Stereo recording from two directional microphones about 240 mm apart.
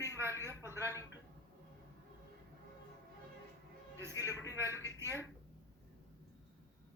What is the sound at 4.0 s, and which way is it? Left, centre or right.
A woman's voice, centre.